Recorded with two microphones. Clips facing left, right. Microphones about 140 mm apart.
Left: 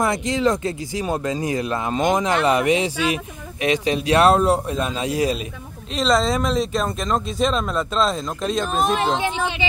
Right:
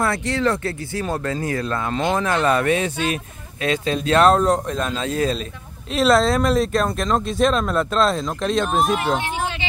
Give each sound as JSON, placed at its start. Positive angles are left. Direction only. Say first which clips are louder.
{"t": 0.0, "sound": "speech", "louder": "left 1 dB", "side_deg": 15}
{"t": 5.9, "sound": "speech", "louder": "right 3 dB", "side_deg": 0}